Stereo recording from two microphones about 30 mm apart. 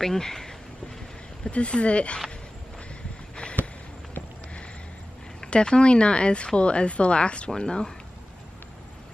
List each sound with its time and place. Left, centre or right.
0.0 s speech: centre
1.4 s speech: left
5.4 s speech: left
7.5 s speech: left